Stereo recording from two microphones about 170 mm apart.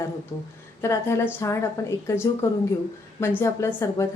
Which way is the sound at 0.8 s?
15° left (ahead or behind).